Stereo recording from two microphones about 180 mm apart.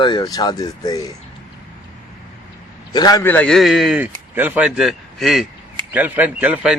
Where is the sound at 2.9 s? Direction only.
20° left (ahead or behind).